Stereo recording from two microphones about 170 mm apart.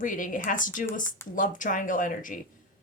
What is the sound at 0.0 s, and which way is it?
Speech, 50° left (ahead or behind).